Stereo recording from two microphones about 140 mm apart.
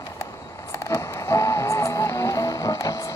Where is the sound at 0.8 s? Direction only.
20° left (ahead or behind).